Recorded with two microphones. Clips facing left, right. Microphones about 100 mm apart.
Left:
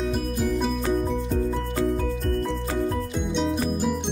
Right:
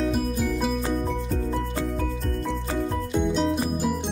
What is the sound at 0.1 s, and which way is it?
Music, centre (ahead or behind).